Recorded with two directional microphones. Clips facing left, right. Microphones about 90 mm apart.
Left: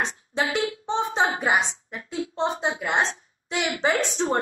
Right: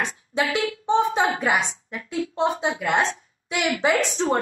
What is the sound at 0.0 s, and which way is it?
Speech, 20° left (ahead or behind).